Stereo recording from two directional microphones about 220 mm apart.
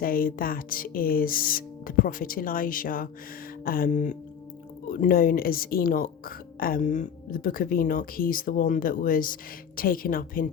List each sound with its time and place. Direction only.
0.0 s speech: 40° left (ahead or behind)